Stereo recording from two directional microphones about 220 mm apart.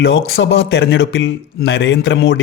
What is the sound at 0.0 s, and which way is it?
A man's voice, 60° left (ahead or behind).